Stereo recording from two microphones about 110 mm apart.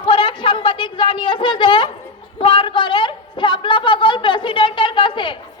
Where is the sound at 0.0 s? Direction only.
50° left (ahead or behind).